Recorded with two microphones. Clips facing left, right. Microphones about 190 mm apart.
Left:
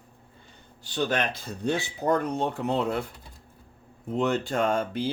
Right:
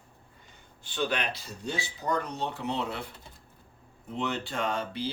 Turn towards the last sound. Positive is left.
turn(degrees=50)  # may be behind; listen again after turning